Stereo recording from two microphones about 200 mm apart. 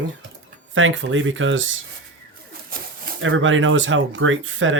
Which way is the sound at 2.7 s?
45° right (ahead or behind).